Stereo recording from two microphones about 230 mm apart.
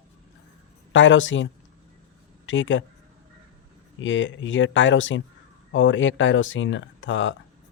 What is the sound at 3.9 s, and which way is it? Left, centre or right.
Speech, left.